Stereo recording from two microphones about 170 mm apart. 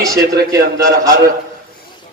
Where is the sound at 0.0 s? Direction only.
20° right (ahead or behind).